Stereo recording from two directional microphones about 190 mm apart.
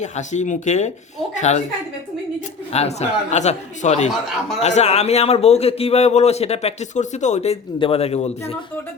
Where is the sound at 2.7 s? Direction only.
35° left (ahead or behind).